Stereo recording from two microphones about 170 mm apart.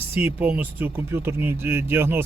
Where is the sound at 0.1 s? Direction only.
10° right (ahead or behind).